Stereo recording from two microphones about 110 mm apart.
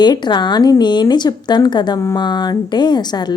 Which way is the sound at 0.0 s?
45° left (ahead or behind).